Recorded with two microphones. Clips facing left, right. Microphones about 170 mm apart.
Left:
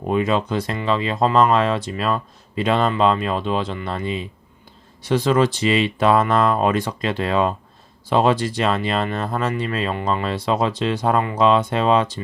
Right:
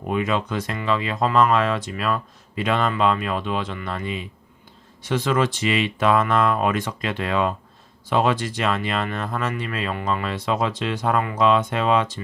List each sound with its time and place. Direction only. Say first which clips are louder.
0.1 s speech: left 4 dB; 30° left (ahead or behind)